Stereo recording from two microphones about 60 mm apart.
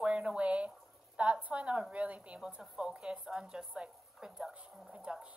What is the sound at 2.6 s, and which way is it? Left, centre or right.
A woman's voice, centre.